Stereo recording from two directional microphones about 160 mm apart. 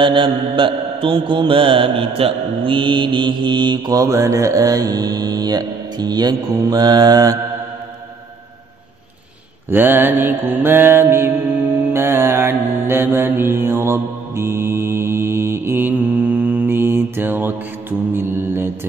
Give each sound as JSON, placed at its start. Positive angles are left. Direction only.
{"t": 0.0, "sound": "mantra", "side_deg": -30}
{"t": 9.7, "sound": "mantra", "side_deg": -10}